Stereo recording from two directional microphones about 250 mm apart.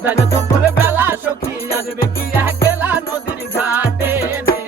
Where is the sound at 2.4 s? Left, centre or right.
Centre.